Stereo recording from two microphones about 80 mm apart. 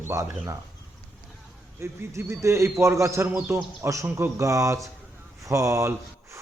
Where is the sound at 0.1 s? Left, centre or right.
Right.